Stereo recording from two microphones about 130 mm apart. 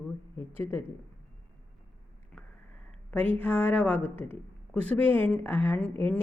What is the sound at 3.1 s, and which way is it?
A woman's voice, 10° left (ahead or behind).